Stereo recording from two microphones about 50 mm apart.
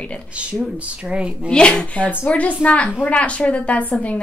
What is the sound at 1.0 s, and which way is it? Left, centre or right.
Speech, right.